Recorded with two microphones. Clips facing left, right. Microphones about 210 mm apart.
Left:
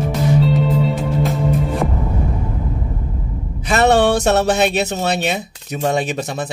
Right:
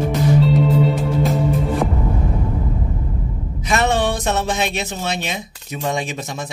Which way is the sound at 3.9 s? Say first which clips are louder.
Left 6 dB; 75° left (ahead or behind).